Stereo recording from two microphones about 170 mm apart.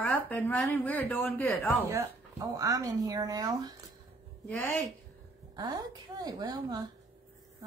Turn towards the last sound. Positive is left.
turn(degrees=-25)  # may be behind; listen again after turning